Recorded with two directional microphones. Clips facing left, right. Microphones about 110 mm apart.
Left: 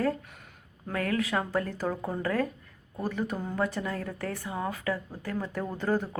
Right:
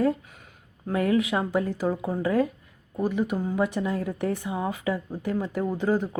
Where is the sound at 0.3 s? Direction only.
Centre (ahead or behind).